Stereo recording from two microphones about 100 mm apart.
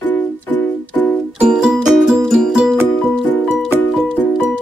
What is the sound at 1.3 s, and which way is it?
Music, 10° right (ahead or behind).